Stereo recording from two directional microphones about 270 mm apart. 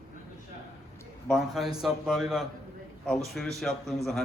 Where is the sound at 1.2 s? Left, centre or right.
Centre.